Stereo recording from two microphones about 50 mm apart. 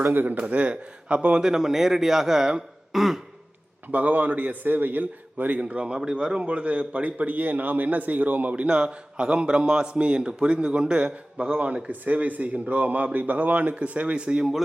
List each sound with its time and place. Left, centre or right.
0.0 s a man's voice: right
0.3 s a man's voice: right
1.4 s a man's voice: centre
3.9 s a man's voice: right
8.6 s a man's voice: centre